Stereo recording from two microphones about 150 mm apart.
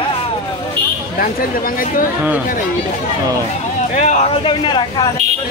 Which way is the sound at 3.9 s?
50° left (ahead or behind).